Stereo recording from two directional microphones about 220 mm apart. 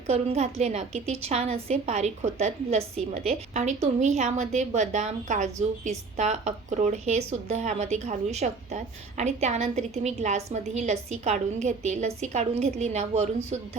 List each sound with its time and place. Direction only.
0.1 s speech: 30° right (ahead or behind)